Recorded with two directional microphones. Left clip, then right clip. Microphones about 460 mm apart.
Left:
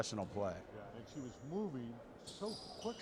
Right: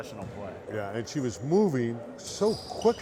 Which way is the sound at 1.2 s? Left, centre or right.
Right.